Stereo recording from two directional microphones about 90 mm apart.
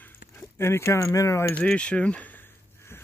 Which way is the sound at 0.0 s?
25° left (ahead or behind).